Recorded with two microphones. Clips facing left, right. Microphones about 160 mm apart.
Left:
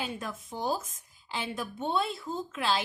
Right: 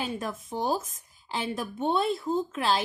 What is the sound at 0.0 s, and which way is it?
A woman's voice, 45° right (ahead or behind).